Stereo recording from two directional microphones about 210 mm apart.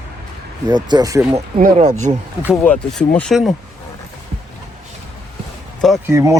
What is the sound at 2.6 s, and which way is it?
Speech, 5° left (ahead or behind).